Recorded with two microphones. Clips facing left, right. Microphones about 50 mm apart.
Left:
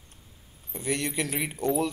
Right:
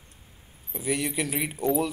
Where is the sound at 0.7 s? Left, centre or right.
Centre.